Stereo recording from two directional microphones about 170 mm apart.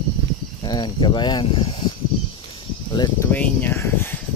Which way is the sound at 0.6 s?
25° left (ahead or behind).